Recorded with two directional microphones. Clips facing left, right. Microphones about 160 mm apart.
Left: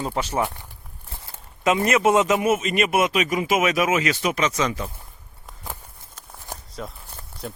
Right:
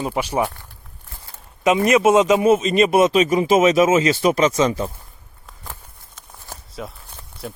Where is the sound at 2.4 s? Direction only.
25° right (ahead or behind).